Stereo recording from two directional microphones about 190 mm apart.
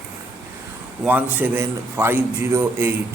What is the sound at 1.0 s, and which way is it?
A man's voice, 10° right (ahead or behind).